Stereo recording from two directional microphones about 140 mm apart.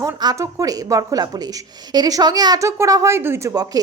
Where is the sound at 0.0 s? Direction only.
25° right (ahead or behind).